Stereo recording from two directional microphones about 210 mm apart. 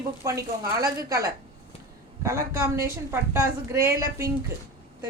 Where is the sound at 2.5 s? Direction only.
10° right (ahead or behind).